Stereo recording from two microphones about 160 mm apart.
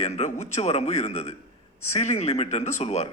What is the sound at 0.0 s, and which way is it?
A man's voice, 45° left (ahead or behind).